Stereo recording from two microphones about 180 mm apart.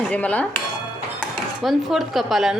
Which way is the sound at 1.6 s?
Centre (ahead or behind).